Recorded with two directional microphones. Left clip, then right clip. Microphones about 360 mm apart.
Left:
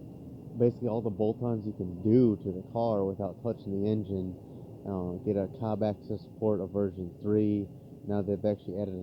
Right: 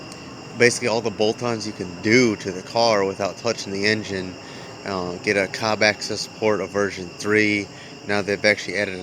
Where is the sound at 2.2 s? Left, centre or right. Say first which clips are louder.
Right 7 dB; centre.